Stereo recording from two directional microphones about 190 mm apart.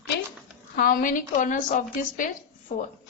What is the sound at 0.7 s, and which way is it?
A woman's voice, 50° left (ahead or behind).